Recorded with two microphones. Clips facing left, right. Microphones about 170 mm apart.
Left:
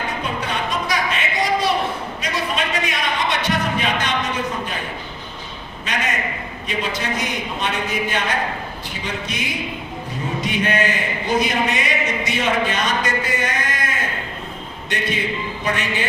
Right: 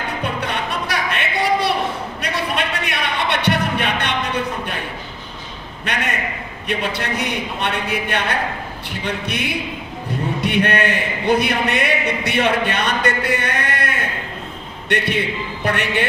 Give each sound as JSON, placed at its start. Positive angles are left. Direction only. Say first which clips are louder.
{"t": 0.2, "sound": "music", "louder": "right 1 dB", "side_deg": -65}
{"t": 5.8, "sound": "a sound", "louder": "right 1 dB", "side_deg": -65}
{"t": 6.7, "sound": "a man's voice", "louder": "right 2 dB", "side_deg": -65}